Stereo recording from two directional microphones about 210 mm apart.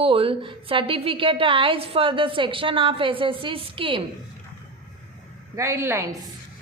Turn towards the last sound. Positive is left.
turn(degrees=-10)  # may be behind; listen again after turning